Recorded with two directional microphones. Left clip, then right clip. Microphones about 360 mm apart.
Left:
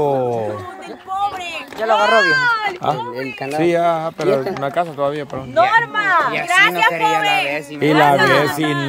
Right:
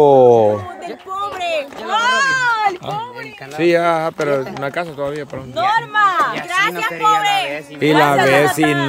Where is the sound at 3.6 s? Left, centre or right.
Centre.